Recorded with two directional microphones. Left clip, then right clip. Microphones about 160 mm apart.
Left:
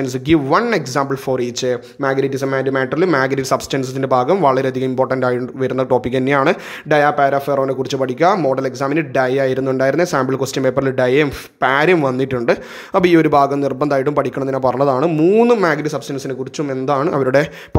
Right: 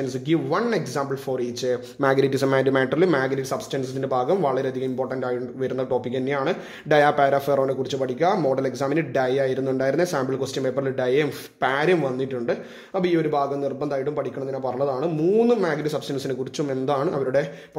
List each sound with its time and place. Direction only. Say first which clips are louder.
0.0 s speech: left 8 dB; 25° left (ahead or behind)
2.0 s speech: even; 5° left (ahead or behind); by 6.5 s 30° left (ahead or behind)
6.9 s speech: left 4 dB; 15° left (ahead or behind)
17.2 s speech: left 8 dB; 35° left (ahead or behind)